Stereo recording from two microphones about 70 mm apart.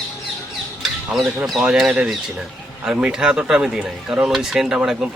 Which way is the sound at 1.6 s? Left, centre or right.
Centre.